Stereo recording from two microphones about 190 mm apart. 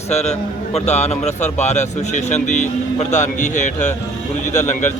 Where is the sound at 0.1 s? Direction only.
35° left (ahead or behind).